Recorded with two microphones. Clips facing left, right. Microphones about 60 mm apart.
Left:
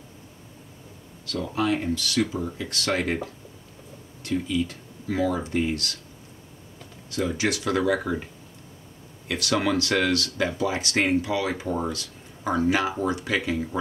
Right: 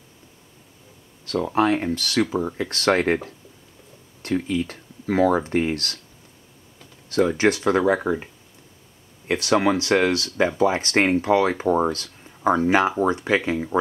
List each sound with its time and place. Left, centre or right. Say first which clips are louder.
1.2 s speech: right 6 dB; right
4.2 s speech: right 2 dB; right
7.1 s speech: right 7 dB; right
9.3 s speech: right 5 dB; right